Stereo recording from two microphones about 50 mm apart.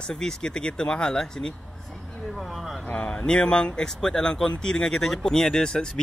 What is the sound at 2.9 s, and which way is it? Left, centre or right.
Speech, left.